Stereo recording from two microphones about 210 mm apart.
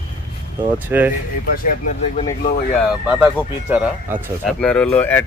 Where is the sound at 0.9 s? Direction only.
10° right (ahead or behind).